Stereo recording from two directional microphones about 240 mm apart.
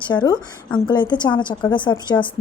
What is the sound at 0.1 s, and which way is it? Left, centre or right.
A woman's voice, centre.